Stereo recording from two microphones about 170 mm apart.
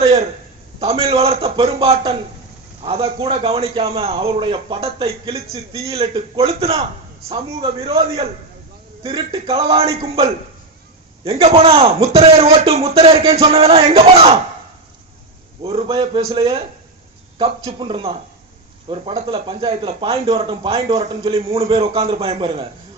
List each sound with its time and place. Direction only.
0.0 s a sound: 35° right (ahead or behind)
0.8 s a man's voice: 35° right (ahead or behind)
11.3 s a man's voice: 35° right (ahead or behind)
15.6 s a man's voice: 35° right (ahead or behind)
17.7 s a man's voice: 30° right (ahead or behind)